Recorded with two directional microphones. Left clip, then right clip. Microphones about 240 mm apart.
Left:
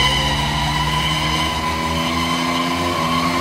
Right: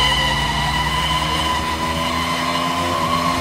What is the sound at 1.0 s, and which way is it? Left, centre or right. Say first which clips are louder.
Vehicle: even; right.